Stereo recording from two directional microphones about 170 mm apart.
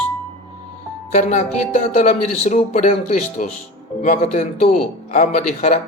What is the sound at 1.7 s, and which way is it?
A man's voice, 45° left (ahead or behind).